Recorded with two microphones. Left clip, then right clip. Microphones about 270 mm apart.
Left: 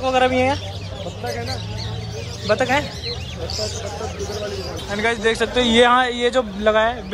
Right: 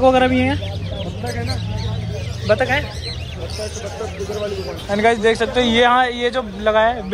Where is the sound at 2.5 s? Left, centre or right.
Centre.